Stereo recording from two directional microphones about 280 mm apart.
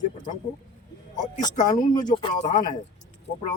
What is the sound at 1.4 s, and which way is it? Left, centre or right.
Speech, centre.